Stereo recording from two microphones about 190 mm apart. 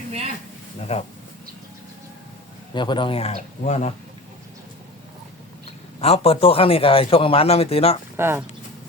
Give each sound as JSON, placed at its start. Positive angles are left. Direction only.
{"t": 0.8, "sound": "speech", "side_deg": 35}
{"t": 2.7, "sound": "speech", "side_deg": 25}
{"t": 6.0, "sound": "a man's voice", "side_deg": 30}
{"t": 8.1, "sound": "speech", "side_deg": -10}